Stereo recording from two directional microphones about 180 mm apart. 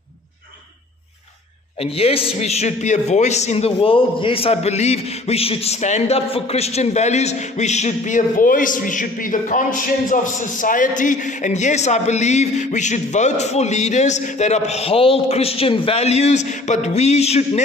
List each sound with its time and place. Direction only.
1.8 s a man's voice: 30° left (ahead or behind)